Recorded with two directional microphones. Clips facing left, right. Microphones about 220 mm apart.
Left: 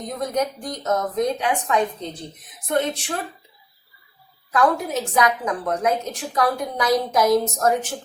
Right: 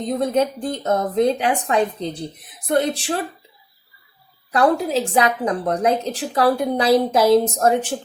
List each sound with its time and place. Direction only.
0.0 s speech: 30° right (ahead or behind)
4.5 s speech: 30° right (ahead or behind)